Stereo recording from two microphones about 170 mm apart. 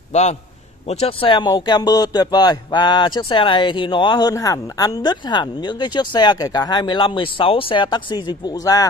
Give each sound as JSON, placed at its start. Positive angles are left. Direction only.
{"t": 0.1, "sound": "a man's voice", "side_deg": 40}